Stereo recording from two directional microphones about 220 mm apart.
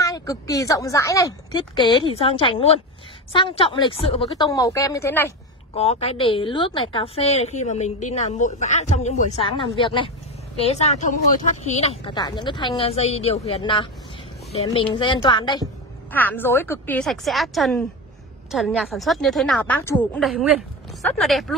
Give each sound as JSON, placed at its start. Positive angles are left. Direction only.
{"t": 0.0, "sound": "a woman's voice", "side_deg": 15}
{"t": 4.5, "sound": "a woman's voice", "side_deg": 15}
{"t": 5.8, "sound": "a woman's voice", "side_deg": 25}
{"t": 16.1, "sound": "a woman's voice", "side_deg": 10}